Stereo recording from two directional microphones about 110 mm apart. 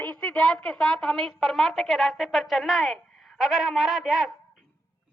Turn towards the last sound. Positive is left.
turn(degrees=-5)  # may be behind; listen again after turning